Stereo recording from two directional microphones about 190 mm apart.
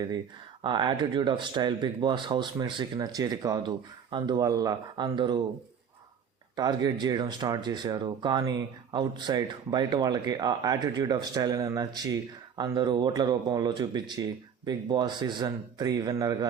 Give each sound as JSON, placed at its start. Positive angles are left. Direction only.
{"t": 0.6, "sound": "speech", "side_deg": -25}
{"t": 6.6, "sound": "speech", "side_deg": -20}